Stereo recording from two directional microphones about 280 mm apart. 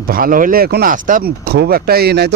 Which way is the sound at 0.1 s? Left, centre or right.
Right.